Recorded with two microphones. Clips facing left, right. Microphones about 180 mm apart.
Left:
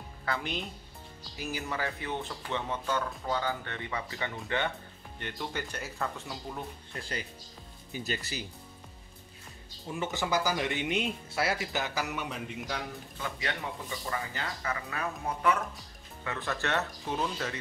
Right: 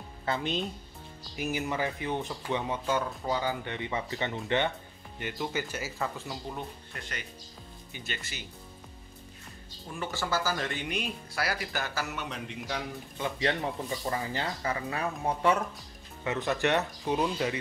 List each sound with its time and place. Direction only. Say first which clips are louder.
0.2 s a woman's voice: right 4 dB; 20° right (ahead or behind)
5.2 s speech: right 4 dB; 5° right (ahead or behind)
7.0 s speech: left 4 dB; 30° left (ahead or behind)
9.9 s speech: left 1 dB; 20° left (ahead or behind)
12.1 s speech: left 1 dB; 5° left (ahead or behind)
13.2 s speech: right 6 dB; 35° right (ahead or behind)
16.3 s speech: right 5 dB; 20° right (ahead or behind)